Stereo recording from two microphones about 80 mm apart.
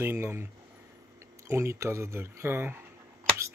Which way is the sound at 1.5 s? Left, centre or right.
Right.